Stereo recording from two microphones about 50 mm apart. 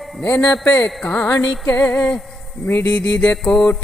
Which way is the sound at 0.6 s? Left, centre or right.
Left.